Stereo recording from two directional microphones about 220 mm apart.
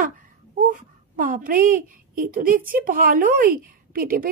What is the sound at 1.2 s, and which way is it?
Speech, 40° right (ahead or behind).